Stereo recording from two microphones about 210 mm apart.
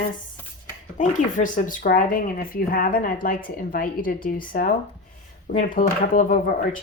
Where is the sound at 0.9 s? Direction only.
40° left (ahead or behind).